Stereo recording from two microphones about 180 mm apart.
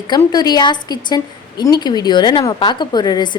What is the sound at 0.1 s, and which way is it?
A woman's voice, 20° left (ahead or behind).